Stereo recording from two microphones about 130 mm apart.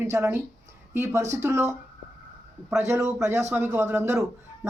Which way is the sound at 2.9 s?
20° right (ahead or behind).